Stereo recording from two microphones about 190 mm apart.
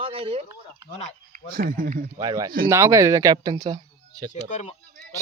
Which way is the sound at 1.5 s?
50° right (ahead or behind).